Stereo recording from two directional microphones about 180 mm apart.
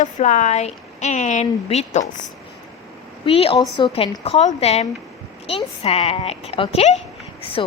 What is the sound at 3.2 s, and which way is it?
A woman's voice, 30° left (ahead or behind).